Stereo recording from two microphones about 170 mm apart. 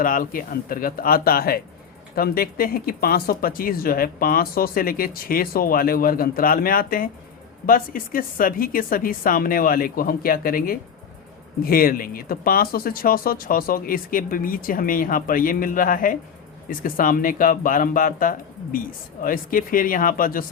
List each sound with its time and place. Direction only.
0.0 s speech: 55° left (ahead or behind)